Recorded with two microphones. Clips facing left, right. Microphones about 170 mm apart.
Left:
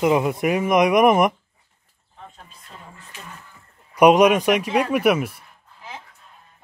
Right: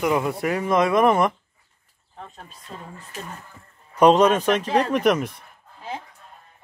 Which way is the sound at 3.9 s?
10° left (ahead or behind).